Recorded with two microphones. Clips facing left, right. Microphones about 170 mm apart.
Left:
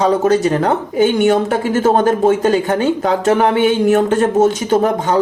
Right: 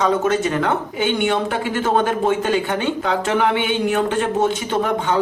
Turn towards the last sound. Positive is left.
turn(degrees=40)  # may be behind; listen again after turning